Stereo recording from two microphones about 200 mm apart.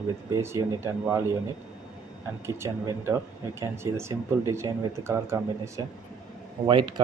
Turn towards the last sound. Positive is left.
turn(degrees=-25)  # may be behind; listen again after turning